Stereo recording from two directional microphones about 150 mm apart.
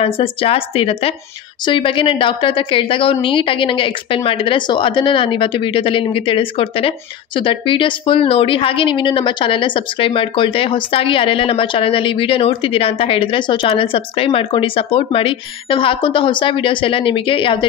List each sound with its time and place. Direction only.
0.0 s a woman's voice: 40° left (ahead or behind)